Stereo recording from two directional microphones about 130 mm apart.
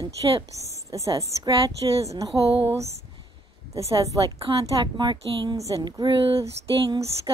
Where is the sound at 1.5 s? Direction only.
40° right (ahead or behind).